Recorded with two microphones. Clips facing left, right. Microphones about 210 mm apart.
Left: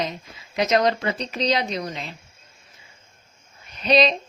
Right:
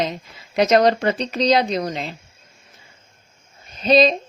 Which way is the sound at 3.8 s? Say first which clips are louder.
Right 4 dB; 45° right (ahead or behind).